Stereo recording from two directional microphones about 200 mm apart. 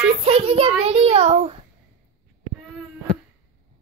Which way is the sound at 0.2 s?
30° right (ahead or behind).